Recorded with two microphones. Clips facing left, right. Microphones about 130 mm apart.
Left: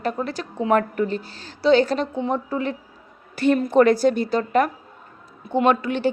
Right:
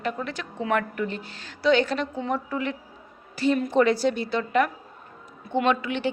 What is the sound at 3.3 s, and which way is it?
A woman's voice, 55° left (ahead or behind).